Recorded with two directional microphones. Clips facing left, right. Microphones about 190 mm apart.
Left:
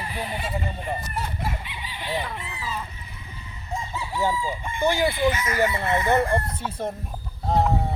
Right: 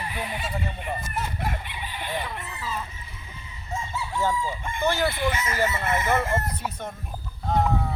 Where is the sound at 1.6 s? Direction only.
55° right (ahead or behind).